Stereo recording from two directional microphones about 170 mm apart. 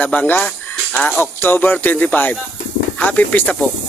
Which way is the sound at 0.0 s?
10° left (ahead or behind).